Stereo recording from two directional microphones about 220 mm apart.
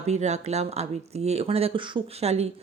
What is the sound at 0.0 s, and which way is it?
A woman's voice, 30° right (ahead or behind).